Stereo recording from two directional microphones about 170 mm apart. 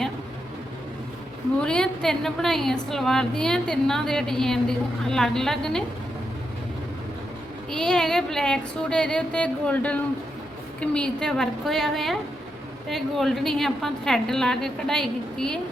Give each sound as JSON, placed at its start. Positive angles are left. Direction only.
{"t": 1.6, "sound": "a woman's voice", "side_deg": 5}
{"t": 7.7, "sound": "a woman's voice", "side_deg": 5}